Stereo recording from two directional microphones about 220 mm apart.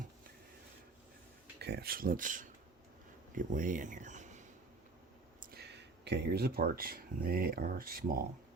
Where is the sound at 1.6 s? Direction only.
45° right (ahead or behind).